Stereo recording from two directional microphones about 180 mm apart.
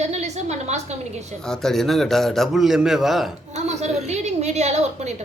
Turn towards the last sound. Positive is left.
turn(degrees=-40)  # may be behind; listen again after turning